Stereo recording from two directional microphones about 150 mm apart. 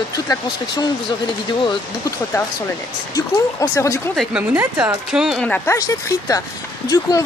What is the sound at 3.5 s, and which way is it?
Speech, 20° left (ahead or behind).